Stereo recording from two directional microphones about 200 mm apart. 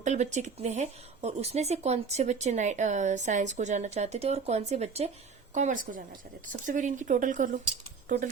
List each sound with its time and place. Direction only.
0.0 s speech: 35° right (ahead or behind)